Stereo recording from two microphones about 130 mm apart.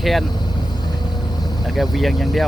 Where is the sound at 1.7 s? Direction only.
Centre (ahead or behind).